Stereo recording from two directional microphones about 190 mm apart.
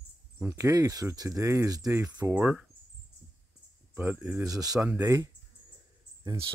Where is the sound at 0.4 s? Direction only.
15° right (ahead or behind).